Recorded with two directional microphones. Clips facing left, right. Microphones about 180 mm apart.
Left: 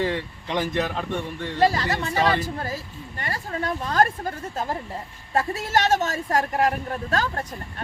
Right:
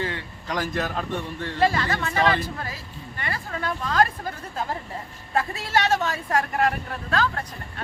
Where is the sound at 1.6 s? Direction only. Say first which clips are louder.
Left 1 dB; 40° left (ahead or behind).